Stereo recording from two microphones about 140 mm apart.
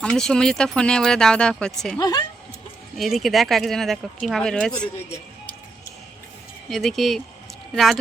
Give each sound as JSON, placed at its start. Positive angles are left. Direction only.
{"t": 0.0, "sound": "speech", "side_deg": 5}
{"t": 2.0, "sound": "speech", "side_deg": 25}
{"t": 3.0, "sound": "speech", "side_deg": 0}
{"t": 6.7, "sound": "speech", "side_deg": 0}